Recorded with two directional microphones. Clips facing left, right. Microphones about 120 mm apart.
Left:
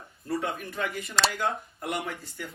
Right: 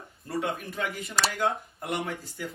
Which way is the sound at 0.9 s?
25° right (ahead or behind).